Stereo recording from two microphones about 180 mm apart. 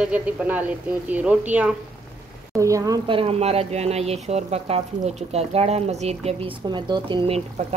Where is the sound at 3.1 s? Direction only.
30° right (ahead or behind).